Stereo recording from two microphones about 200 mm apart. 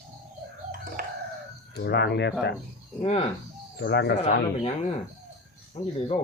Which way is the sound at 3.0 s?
30° left (ahead or behind).